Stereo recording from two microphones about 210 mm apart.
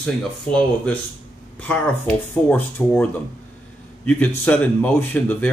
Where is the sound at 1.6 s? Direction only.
5° left (ahead or behind).